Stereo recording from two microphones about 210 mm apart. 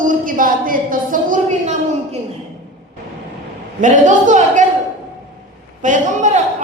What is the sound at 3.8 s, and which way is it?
Speech, 35° right (ahead or behind).